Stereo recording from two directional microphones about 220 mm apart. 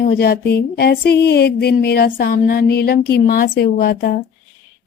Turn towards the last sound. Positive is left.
turn(degrees=45)  # may be behind; listen again after turning